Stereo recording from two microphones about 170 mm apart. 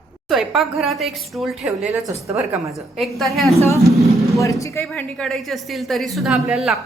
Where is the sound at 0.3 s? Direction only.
Centre (ahead or behind).